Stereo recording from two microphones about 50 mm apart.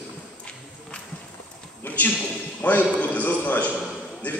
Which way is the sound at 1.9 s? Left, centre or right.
Left.